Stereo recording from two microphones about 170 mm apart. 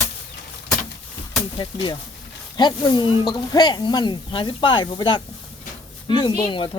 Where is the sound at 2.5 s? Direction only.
25° left (ahead or behind).